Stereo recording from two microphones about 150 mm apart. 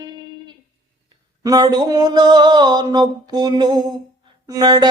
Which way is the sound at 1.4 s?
25° right (ahead or behind).